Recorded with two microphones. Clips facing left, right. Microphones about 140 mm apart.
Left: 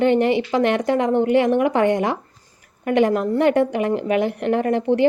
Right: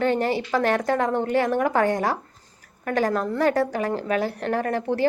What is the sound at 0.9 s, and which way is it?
Speech, 50° right (ahead or behind).